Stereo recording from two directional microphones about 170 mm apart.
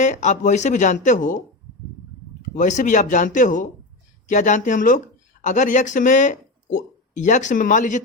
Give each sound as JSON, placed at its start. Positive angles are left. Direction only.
{"t": 0.0, "sound": "speech", "side_deg": 45}
{"t": 2.6, "sound": "speech", "side_deg": 45}